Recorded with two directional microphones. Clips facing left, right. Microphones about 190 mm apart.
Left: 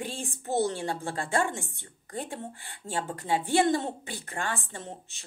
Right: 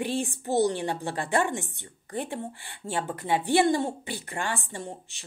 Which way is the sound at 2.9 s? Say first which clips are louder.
Right 2 dB; 40° left (ahead or behind).